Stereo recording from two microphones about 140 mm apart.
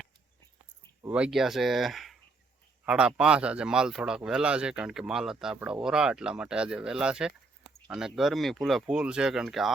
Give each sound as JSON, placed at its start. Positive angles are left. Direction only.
{"t": 1.1, "sound": "speech", "side_deg": -5}